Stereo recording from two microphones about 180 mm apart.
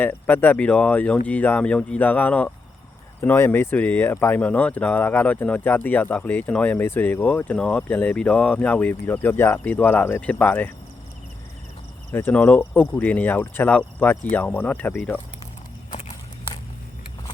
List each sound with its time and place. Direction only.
0.0 s speech: 10° left (ahead or behind)
12.1 s speech: 10° left (ahead or behind)
15.9 s walk: 45° left (ahead or behind)